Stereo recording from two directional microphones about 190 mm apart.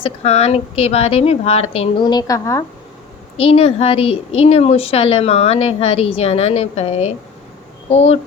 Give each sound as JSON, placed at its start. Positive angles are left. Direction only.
{"t": 0.0, "sound": "a woman's voice", "side_deg": 35}
{"t": 3.3, "sound": "a woman's voice", "side_deg": 30}